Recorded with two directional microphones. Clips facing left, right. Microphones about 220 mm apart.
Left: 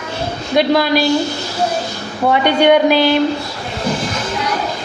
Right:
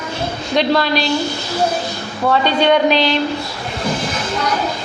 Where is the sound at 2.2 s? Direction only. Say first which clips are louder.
Left 3 dB; 15° left (ahead or behind).